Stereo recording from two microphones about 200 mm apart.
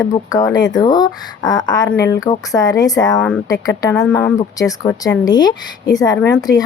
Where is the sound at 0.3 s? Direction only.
20° left (ahead or behind).